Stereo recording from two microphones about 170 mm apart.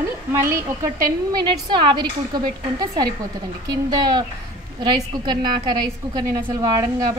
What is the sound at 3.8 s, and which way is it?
A woman's voice, 25° right (ahead or behind).